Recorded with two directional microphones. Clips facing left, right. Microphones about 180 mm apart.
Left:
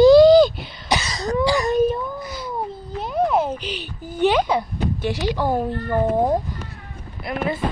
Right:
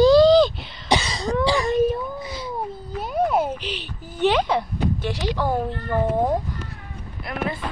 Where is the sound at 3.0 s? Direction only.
5° right (ahead or behind); by 6.3 s 10° left (ahead or behind).